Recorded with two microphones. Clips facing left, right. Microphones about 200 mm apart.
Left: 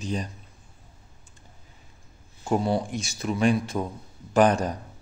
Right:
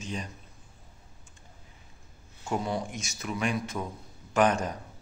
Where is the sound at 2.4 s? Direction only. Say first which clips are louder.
Left 6 dB; 35° left (ahead or behind).